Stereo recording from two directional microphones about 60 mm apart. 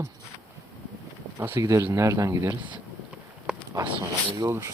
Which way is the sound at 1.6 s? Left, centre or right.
Right.